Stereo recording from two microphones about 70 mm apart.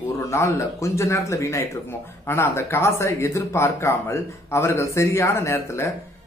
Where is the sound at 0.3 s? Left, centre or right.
Left.